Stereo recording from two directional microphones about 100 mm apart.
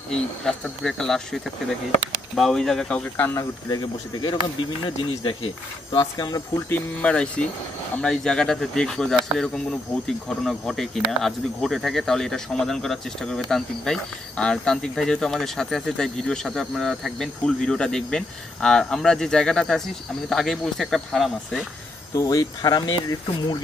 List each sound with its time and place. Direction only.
0.1 s speech: 5° left (ahead or behind)
3.2 s speech: 35° left (ahead or behind)
6.1 s speech: 35° left (ahead or behind)
6.7 s speech: 15° left (ahead or behind)
22.1 s speech: 35° left (ahead or behind)